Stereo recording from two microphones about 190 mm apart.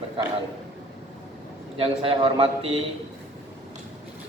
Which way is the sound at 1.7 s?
30° right (ahead or behind).